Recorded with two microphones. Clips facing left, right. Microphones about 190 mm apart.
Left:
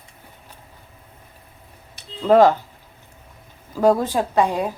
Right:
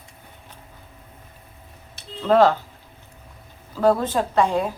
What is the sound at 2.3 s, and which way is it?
Speech, 15° left (ahead or behind).